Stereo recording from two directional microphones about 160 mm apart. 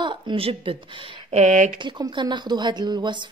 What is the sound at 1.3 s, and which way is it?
Speech, 45° right (ahead or behind).